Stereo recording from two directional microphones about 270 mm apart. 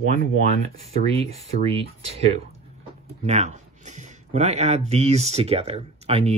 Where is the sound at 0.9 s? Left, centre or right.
Right.